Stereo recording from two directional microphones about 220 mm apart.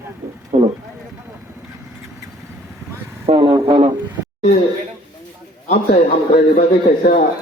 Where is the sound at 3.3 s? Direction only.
25° right (ahead or behind).